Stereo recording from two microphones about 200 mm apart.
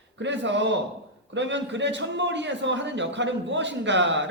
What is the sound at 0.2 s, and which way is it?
A man's voice, 65° right (ahead or behind).